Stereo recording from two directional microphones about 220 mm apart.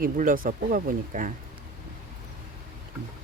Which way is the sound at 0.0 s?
40° right (ahead or behind).